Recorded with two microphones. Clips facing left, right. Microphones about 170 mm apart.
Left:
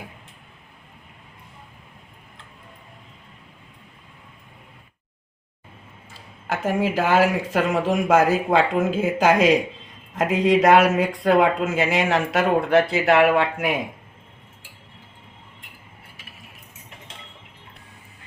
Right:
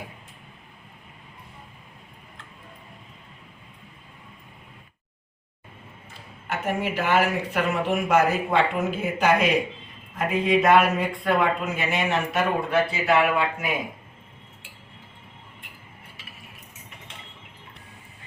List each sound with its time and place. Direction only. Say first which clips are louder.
6.5 s speech: left 4 dB; 90° left; by 13.7 s 70° left (ahead or behind)